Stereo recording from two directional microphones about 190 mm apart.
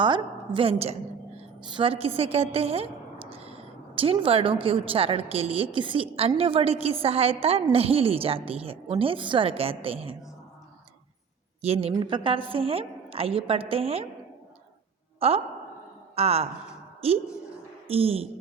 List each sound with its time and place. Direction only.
0.0 s a woman's voice: 25° right (ahead or behind)
11.6 s a woman's voice: 35° right (ahead or behind)
15.2 s a woman's voice: 30° right (ahead or behind)